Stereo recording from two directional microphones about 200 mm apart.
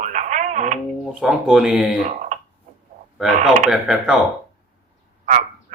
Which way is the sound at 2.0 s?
35° right (ahead or behind).